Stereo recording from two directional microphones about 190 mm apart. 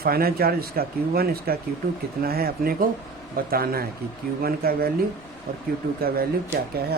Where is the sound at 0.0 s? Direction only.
50° right (ahead or behind).